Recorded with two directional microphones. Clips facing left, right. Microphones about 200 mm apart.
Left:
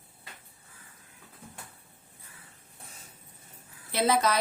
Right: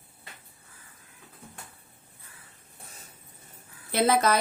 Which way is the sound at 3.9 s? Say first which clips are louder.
Right 2 dB; 50° right (ahead or behind).